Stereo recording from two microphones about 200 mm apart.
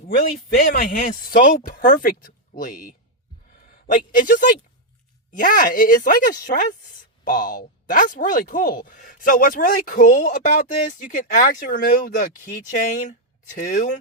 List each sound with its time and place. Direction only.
0.2 s a woman's voice: 45° left (ahead or behind)
3.9 s a woman's voice: 45° left (ahead or behind)